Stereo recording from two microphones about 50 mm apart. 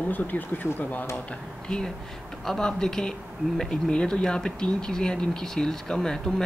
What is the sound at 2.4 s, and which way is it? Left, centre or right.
Speech, centre.